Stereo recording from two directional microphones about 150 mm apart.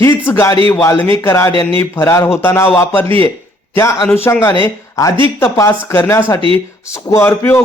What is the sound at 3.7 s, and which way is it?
Speech, 20° left (ahead or behind).